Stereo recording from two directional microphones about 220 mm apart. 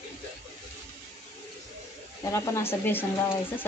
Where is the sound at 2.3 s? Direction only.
10° left (ahead or behind).